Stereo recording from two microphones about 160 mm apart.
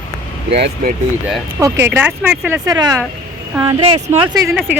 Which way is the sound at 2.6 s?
25° right (ahead or behind).